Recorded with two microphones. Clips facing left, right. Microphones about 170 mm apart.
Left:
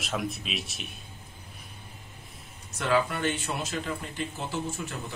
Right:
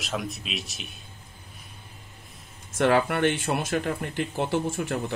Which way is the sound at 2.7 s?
60° right (ahead or behind).